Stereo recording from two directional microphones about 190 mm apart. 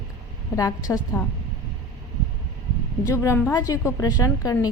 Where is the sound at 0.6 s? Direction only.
20° left (ahead or behind).